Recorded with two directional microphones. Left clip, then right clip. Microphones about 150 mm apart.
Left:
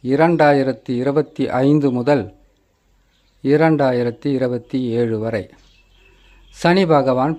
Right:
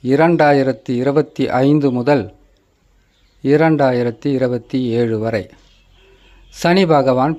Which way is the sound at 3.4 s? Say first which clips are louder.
Right 2 dB; 5° right (ahead or behind).